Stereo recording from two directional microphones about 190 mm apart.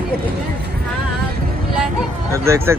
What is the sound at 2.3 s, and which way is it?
Speech, 15° right (ahead or behind).